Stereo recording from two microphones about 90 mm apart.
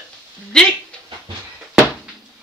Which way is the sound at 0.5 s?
5° left (ahead or behind).